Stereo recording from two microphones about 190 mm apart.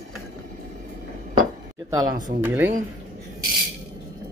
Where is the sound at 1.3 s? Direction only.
20° right (ahead or behind).